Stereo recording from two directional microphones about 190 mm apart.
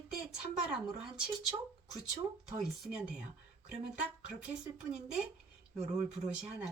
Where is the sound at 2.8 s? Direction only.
5° right (ahead or behind).